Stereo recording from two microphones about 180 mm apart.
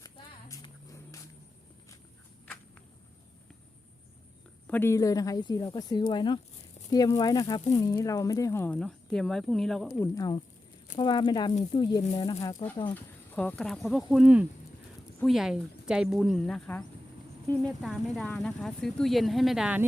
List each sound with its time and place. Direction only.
0.0 s a sound: 20° left (ahead or behind)
4.6 s speech: 10° left (ahead or behind)
9.9 s speech: 15° left (ahead or behind)
12.9 s speech: 10° left (ahead or behind)